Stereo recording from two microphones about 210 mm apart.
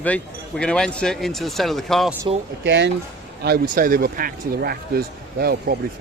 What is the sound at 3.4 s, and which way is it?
Speech, 45° right (ahead or behind).